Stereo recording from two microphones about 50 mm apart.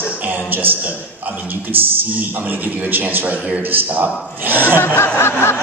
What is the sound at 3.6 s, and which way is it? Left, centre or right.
A man's voice, right.